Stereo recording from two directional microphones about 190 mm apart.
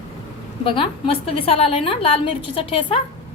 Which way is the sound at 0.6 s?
25° left (ahead or behind).